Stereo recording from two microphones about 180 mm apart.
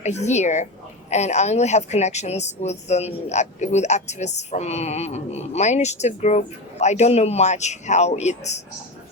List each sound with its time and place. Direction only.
0.0 s speech: 40° left (ahead or behind)